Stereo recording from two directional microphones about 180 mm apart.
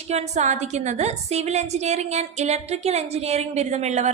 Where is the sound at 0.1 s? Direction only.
40° right (ahead or behind).